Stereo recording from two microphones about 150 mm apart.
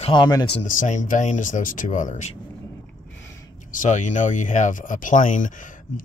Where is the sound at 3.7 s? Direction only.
60° left (ahead or behind).